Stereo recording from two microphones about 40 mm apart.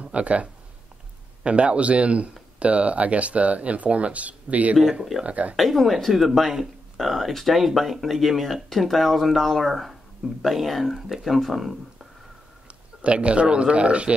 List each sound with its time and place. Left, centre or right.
0.0 s speech: right
5.6 s speech: centre
12.6 s speech: right